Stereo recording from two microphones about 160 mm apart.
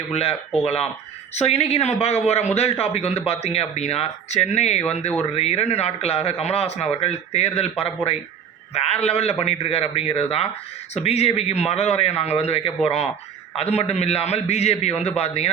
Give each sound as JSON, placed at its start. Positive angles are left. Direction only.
{"t": 0.1, "sound": "a man's voice", "side_deg": 40}